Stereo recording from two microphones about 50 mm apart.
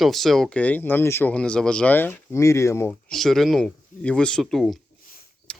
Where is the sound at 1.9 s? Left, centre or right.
Left.